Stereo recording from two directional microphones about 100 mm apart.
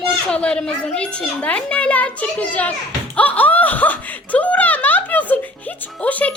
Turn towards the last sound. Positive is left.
turn(degrees=15)  # may be behind; listen again after turning